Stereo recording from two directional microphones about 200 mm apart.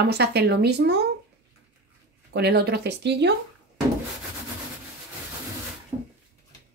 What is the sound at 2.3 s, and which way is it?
A woman's voice, 55° right (ahead or behind).